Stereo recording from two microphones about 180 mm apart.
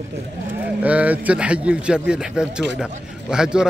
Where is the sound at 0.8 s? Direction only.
10° right (ahead or behind).